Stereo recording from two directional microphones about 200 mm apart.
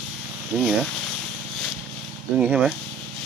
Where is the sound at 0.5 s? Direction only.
5° right (ahead or behind).